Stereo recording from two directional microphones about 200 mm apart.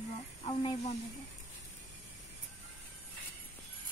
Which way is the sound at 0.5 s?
25° left (ahead or behind).